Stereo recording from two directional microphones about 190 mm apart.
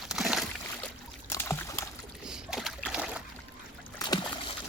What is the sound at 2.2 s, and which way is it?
Boat, centre (ahead or behind).